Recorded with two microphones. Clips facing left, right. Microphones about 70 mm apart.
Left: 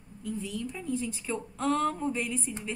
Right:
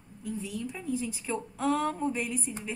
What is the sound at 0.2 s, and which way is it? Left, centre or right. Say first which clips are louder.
A woman's voice: left 1 dB; centre.